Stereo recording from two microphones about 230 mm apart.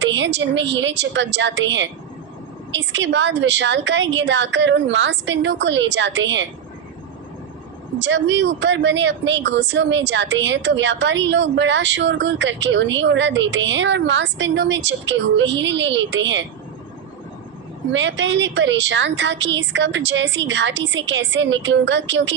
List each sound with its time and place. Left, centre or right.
0.0 s a woman's voice: right
7.9 s a woman's voice: right
17.9 s a woman's voice: right